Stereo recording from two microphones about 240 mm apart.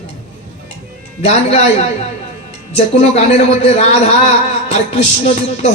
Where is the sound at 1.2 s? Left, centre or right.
Left.